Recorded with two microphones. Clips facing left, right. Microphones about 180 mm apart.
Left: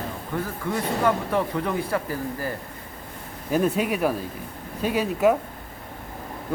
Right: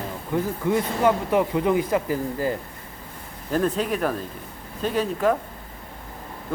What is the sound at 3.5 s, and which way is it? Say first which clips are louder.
Speech: left 1 dB; 10° left (ahead or behind).